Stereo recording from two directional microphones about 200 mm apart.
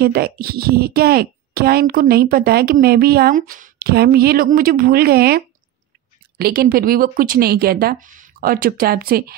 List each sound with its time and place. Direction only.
0.0 s a woman's voice: 50° right (ahead or behind)